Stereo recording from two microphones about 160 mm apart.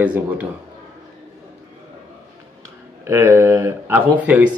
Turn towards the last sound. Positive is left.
turn(degrees=-10)  # may be behind; listen again after turning